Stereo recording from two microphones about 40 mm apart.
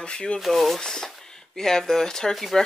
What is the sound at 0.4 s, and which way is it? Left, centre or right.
Speech, centre.